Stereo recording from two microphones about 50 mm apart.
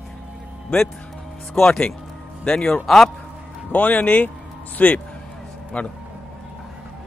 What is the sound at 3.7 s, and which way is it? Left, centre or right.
A man's voice, left.